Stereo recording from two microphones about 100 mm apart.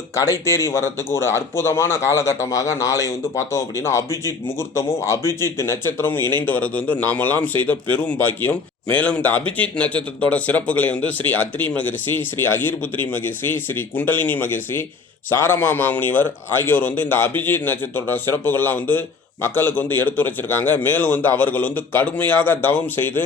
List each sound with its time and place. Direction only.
0.2 s a man's voice: 30° left (ahead or behind)